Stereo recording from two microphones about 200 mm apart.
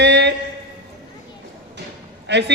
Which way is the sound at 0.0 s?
60° right (ahead or behind).